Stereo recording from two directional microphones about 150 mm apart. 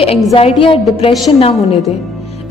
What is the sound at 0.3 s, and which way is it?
Speech, 40° left (ahead or behind).